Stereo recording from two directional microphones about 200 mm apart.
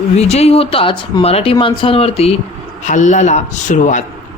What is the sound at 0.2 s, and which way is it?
Speech, 30° left (ahead or behind).